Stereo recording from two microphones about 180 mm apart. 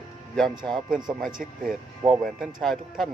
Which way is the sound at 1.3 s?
50° right (ahead or behind).